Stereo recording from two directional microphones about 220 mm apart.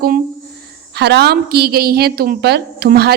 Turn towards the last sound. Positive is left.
turn(degrees=-45)  # may be behind; listen again after turning